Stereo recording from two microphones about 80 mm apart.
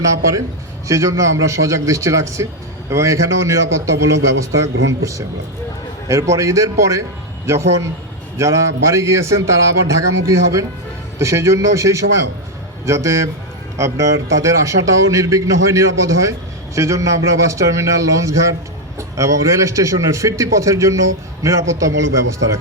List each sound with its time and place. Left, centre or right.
0.0 s a man's voice: right